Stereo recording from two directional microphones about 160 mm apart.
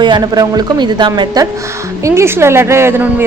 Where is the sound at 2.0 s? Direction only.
15° right (ahead or behind).